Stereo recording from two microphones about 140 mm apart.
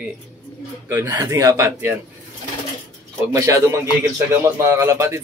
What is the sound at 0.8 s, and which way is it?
Speech, 20° right (ahead or behind).